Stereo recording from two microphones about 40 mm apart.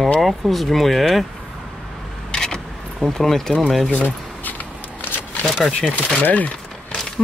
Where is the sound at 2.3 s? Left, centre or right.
Centre.